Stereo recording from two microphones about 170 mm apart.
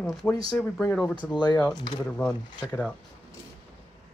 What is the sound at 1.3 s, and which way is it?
Speech, 25° left (ahead or behind).